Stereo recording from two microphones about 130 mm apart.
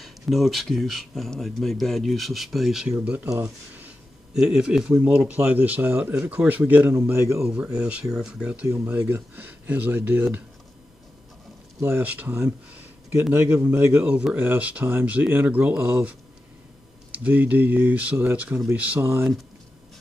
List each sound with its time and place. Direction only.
0.0 s speech: centre (ahead or behind)
3.3 s a sound: 15° right (ahead or behind)
4.4 s a man's voice: 5° right (ahead or behind); by 7.4 s 20° right (ahead or behind)
7.4 s a man's voice: 5° right (ahead or behind)
11.8 s a man's voice: 15° right (ahead or behind)